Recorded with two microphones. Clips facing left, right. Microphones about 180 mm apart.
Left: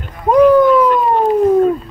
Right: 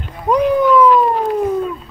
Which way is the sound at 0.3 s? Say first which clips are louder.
Left 5 dB; 50° left (ahead or behind).